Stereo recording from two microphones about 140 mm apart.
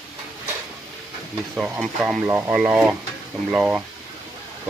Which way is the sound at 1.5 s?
10° right (ahead or behind).